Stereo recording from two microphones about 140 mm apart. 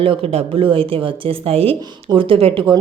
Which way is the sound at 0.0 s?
45° right (ahead or behind).